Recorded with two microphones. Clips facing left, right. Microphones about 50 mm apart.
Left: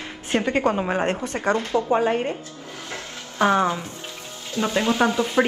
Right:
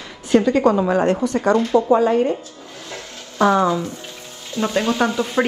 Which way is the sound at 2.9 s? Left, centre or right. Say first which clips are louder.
Right 1 dB; left.